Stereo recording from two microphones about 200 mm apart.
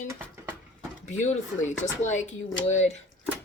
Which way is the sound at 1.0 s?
35° left (ahead or behind).